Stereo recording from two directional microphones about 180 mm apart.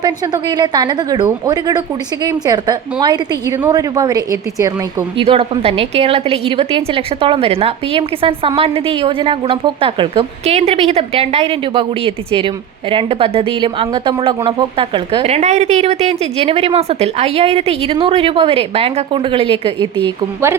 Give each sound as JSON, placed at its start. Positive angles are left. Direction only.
{"t": 0.0, "sound": "speech", "side_deg": -25}
{"t": 5.1, "sound": "a woman's voice", "side_deg": -30}